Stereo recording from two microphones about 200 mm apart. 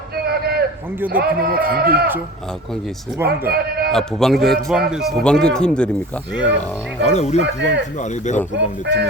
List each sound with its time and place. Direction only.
0.3 s a sound: 50° right (ahead or behind)
1.0 s a man's voice: 50° right (ahead or behind)
3.2 s a man's voice: 50° right (ahead or behind)
3.9 s speech: centre (ahead or behind)
7.0 s speech: 35° left (ahead or behind)
7.4 s speech: 60° right (ahead or behind)
7.9 s speech: 35° left (ahead or behind)
8.5 s speech: 60° right (ahead or behind)